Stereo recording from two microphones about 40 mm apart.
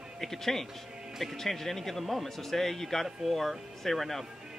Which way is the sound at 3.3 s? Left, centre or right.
Centre.